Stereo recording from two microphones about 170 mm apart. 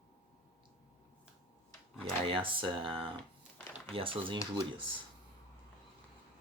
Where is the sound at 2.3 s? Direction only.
30° right (ahead or behind).